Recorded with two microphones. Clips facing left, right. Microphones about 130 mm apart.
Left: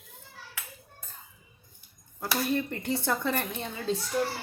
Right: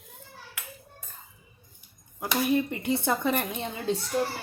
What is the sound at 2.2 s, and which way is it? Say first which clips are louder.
Cutlery: right 3 dB; 15° right (ahead or behind).